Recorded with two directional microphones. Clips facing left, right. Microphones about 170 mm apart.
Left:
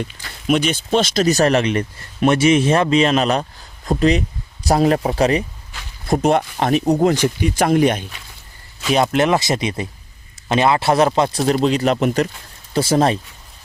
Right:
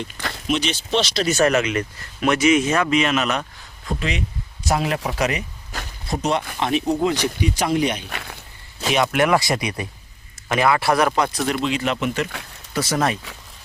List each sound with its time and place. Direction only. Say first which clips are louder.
0.4 s a man's voice: left 6 dB; 50° left (ahead or behind); by 5.5 s 30° left (ahead or behind)
5.7 s a sound: right 6 dB; 40° right (ahead or behind)
6.1 s speech: left 7 dB; 50° left (ahead or behind)
8.1 s speech: right 8 dB; 70° right (ahead or behind)
8.9 s a man's voice: left 2 dB; 30° left (ahead or behind)
12.7 s speech: left 6 dB; 30° left (ahead or behind)